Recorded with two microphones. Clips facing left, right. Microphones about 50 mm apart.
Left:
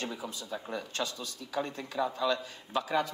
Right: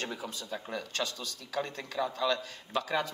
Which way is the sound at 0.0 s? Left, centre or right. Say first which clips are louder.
Even; right.